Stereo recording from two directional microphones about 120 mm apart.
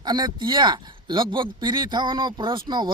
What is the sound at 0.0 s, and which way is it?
Speech, 35° right (ahead or behind).